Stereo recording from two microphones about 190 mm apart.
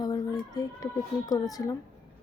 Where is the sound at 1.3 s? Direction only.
20° left (ahead or behind).